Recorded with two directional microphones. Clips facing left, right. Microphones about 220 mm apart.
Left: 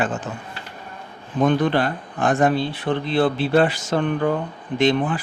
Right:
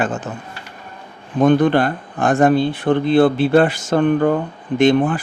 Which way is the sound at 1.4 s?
50° right (ahead or behind).